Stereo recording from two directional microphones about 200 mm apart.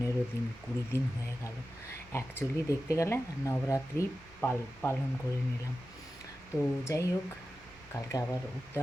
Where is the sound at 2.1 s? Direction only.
10° left (ahead or behind).